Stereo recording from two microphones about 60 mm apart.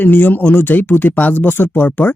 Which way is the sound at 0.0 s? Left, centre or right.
Left.